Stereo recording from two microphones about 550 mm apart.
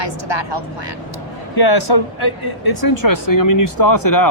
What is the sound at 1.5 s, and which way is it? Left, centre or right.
Speech, left.